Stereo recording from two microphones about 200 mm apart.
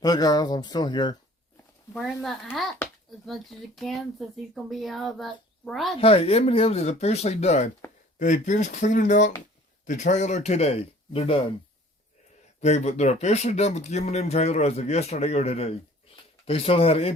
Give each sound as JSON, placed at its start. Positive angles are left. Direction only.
{"t": 0.0, "sound": "speech", "side_deg": 20}
{"t": 2.2, "sound": "speech", "side_deg": 0}
{"t": 6.0, "sound": "speech", "side_deg": 30}
{"t": 12.5, "sound": "speech", "side_deg": 35}